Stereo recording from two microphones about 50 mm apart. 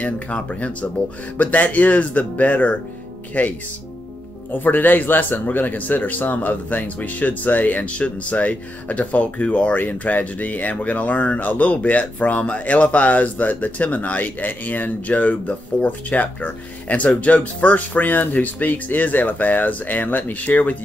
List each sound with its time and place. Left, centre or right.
0.0 s speech: left